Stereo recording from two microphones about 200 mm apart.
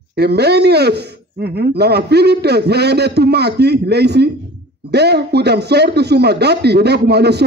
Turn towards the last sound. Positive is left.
turn(degrees=-55)  # may be behind; listen again after turning